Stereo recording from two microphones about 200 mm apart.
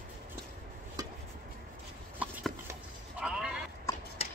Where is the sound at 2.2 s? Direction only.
5° right (ahead or behind).